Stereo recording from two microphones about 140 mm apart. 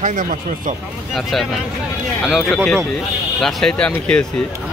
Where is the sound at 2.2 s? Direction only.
Centre (ahead or behind).